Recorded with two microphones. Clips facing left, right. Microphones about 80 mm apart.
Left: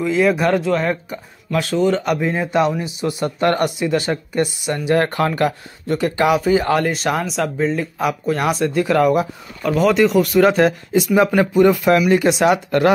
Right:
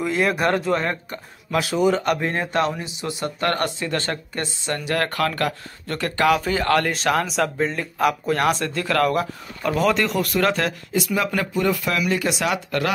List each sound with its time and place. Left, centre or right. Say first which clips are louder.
0.0 s speech: left 4 dB; centre
3.0 s speech: left 6 dB; left; by 8.6 s centre
8.6 s speech: left 6 dB; centre
9.6 s speech: left 5 dB; centre
10.5 s speech: left 8 dB; left